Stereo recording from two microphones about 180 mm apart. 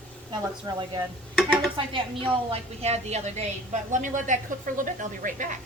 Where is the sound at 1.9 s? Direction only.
30° right (ahead or behind); by 5.5 s 45° right (ahead or behind).